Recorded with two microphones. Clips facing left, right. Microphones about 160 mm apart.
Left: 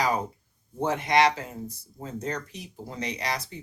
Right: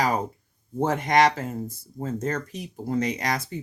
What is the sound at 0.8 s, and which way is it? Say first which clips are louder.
Speech: right 2 dB; 45° right (ahead or behind).